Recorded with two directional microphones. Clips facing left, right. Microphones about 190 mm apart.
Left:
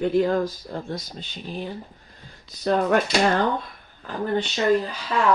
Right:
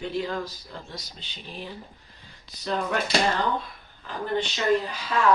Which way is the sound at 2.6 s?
50° left (ahead or behind).